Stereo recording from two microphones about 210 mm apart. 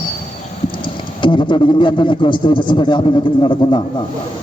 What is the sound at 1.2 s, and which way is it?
A man's voice, 25° left (ahead or behind).